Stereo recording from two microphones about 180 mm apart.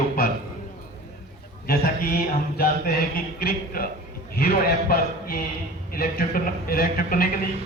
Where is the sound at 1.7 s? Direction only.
55° left (ahead or behind).